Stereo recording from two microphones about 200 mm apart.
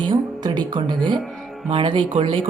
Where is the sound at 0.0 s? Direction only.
25° right (ahead or behind).